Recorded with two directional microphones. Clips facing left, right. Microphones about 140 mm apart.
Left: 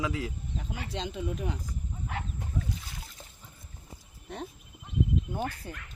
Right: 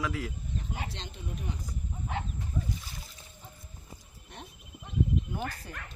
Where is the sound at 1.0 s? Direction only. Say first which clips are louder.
Left 7 dB; 90° left.